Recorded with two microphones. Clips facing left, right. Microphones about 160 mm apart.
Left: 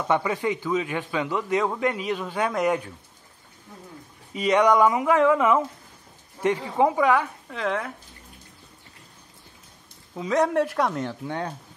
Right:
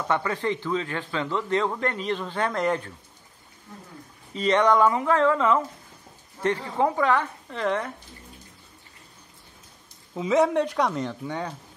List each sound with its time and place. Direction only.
0.1 s a man's voice: 15° left (ahead or behind)
4.3 s a man's voice: 10° left (ahead or behind)
7.4 s speech: centre (ahead or behind)
10.1 s speech: 5° right (ahead or behind)